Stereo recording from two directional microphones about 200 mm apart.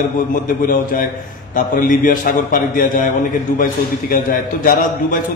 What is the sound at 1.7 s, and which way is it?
A man's voice, 45° left (ahead or behind).